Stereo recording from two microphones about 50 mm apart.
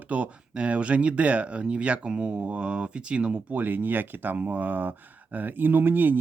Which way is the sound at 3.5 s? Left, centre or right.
Right.